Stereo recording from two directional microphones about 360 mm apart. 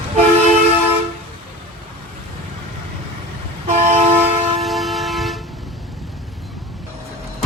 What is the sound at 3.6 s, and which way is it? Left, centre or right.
Vehicle, centre.